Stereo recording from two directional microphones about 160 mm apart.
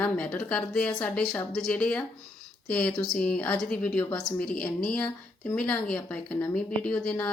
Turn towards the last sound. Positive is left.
turn(degrees=5)  # may be behind; listen again after turning